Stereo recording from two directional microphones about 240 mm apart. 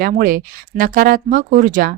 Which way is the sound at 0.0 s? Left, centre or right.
Right.